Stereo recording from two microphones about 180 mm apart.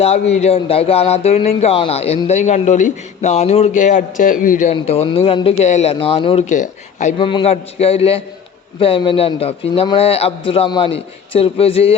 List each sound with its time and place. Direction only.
0.0 s speech: 35° left (ahead or behind)
7.2 s speech: 30° left (ahead or behind)